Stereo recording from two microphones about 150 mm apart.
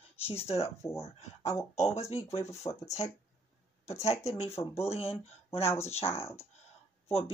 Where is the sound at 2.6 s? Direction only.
30° left (ahead or behind).